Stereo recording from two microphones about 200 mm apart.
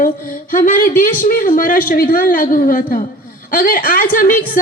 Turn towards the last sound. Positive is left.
turn(degrees=45)  # may be behind; listen again after turning